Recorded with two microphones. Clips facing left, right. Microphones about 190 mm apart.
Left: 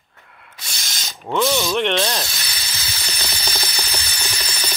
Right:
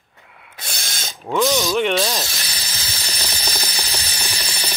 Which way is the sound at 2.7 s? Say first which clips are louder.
Even; 35° right (ahead or behind).